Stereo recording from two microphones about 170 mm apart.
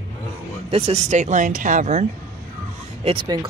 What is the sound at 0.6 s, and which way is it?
Speech, 35° right (ahead or behind).